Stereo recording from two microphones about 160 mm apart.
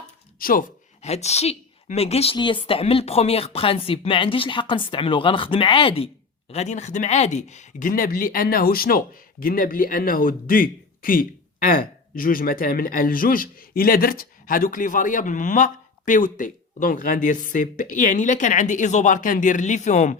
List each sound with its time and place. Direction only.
0.3 s speech: 60° left (ahead or behind)
1.0 s speech: 45° left (ahead or behind)